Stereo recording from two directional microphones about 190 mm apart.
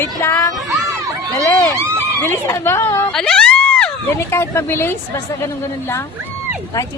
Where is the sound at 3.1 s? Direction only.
5° left (ahead or behind).